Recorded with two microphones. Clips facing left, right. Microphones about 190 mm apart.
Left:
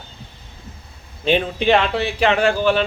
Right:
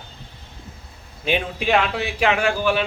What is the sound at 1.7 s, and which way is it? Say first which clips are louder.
Speech: left 3 dB; 5° right (ahead or behind).